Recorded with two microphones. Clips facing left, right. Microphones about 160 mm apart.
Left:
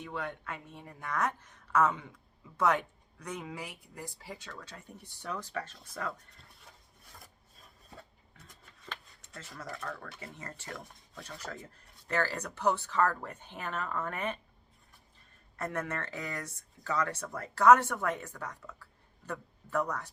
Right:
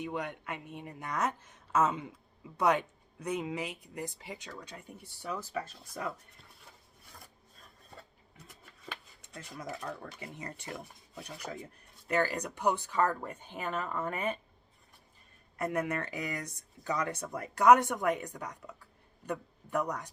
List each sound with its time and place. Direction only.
0.0 s speech: 15° right (ahead or behind)
6.7 s filing: centre (ahead or behind)
8.4 s a sound: 10° right (ahead or behind)
9.7 s speech: 25° right (ahead or behind)
15.5 s speech: 15° right (ahead or behind)